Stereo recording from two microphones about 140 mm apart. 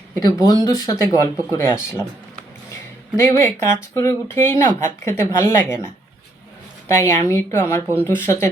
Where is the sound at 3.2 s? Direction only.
20° left (ahead or behind).